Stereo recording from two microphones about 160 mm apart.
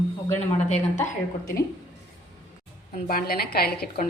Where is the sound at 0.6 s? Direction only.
50° left (ahead or behind).